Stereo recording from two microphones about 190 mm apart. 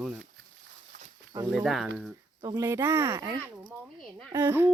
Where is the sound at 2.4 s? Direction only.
20° right (ahead or behind).